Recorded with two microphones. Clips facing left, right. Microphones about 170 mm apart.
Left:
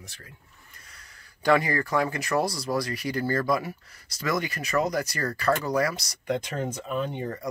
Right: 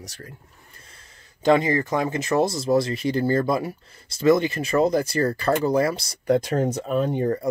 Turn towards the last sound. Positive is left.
turn(degrees=-40)  # may be behind; listen again after turning